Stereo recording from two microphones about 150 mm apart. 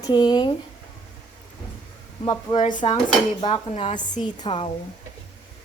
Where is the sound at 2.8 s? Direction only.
40° left (ahead or behind).